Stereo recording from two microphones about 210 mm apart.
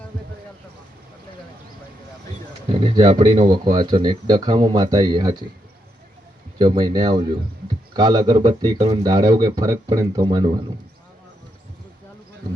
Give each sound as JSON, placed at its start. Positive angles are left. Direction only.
{"t": 2.6, "sound": "speech", "side_deg": -25}
{"t": 6.6, "sound": "speech", "side_deg": -20}